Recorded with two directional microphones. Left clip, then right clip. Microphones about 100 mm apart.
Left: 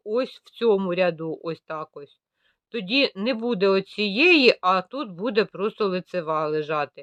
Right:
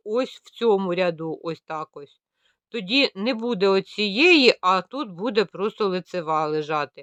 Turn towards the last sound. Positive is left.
turn(degrees=-35)  # may be behind; listen again after turning